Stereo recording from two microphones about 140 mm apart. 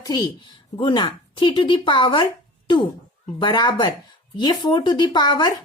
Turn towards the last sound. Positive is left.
turn(degrees=30)  # may be behind; listen again after turning